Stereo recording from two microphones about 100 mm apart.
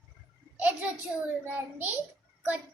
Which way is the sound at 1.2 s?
15° right (ahead or behind).